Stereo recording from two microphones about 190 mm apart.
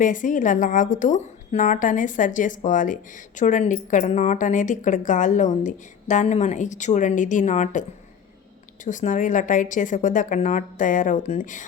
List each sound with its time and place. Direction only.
0.0 s a woman's voice: 45° left (ahead or behind)